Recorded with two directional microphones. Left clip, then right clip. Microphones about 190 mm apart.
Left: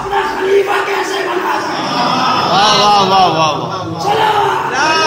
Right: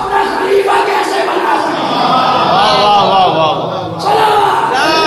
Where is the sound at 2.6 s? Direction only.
30° left (ahead or behind).